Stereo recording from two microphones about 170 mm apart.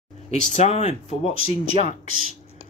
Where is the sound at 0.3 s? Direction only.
40° left (ahead or behind).